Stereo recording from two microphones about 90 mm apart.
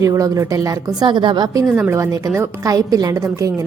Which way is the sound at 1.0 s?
60° right (ahead or behind).